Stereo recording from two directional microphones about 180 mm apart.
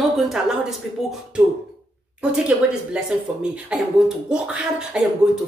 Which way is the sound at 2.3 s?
5° right (ahead or behind).